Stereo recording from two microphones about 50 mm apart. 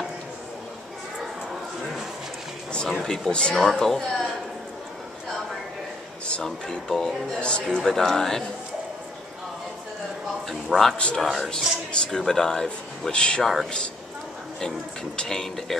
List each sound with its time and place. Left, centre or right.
2.9 s speech: centre
3.3 s speech: left
3.6 s speech: centre
6.2 s speech: centre
7.3 s speech: centre
7.8 s speech: centre
10.7 s speech: centre
11.9 s speech: centre
13.4 s speech: centre
15.1 s speech: centre